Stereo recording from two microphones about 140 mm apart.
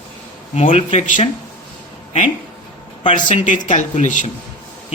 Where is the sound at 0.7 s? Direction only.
60° left (ahead or behind).